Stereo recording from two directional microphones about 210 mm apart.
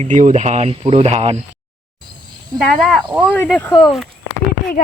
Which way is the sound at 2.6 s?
Centre (ahead or behind).